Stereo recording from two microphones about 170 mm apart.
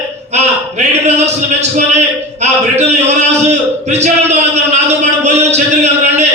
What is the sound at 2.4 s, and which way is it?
A man's voice, 40° right (ahead or behind).